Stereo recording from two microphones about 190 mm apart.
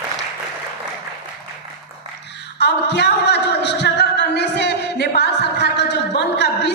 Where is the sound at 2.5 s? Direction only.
65° left (ahead or behind).